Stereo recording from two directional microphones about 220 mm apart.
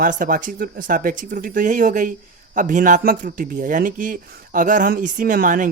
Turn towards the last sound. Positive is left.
turn(degrees=-35)  # may be behind; listen again after turning